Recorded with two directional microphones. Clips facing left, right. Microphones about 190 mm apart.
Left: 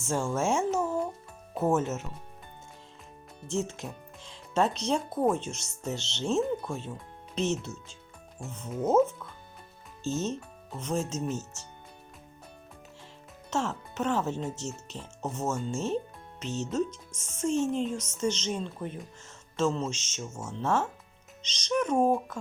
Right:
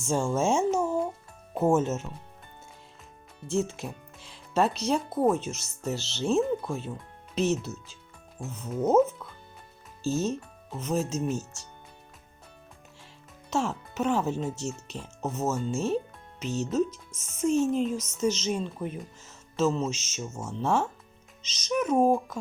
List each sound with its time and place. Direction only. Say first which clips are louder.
0.1 s speech: right 3 dB; 15° right (ahead or behind)
3.5 s speech: right 3 dB; 10° right (ahead or behind)
10.0 s speech: right 3 dB; 10° right (ahead or behind)
13.5 s speech: right 2 dB; 10° right (ahead or behind)